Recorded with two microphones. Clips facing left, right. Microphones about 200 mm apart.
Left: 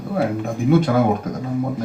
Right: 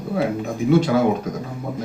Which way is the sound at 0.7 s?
55° left (ahead or behind).